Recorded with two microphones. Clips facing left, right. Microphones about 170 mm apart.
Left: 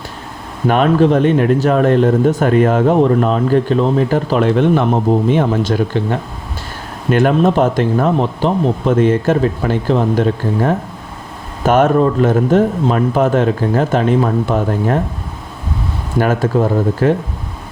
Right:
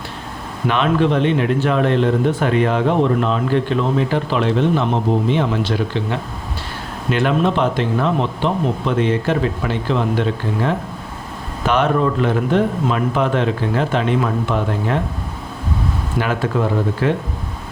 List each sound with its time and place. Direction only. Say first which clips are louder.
0.7 s speech: left 5 dB; 40° left (ahead or behind)
16.1 s speech: left 6 dB; 45° left (ahead or behind)